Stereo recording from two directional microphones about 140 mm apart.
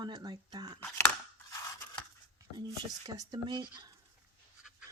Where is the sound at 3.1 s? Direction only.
30° right (ahead or behind).